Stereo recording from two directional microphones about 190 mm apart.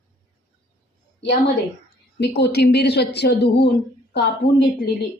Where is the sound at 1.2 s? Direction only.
65° left (ahead or behind).